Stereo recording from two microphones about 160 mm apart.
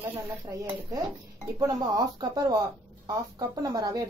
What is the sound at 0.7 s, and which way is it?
Speech, 25° right (ahead or behind).